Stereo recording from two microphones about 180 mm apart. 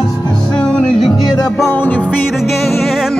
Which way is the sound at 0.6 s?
5° left (ahead or behind).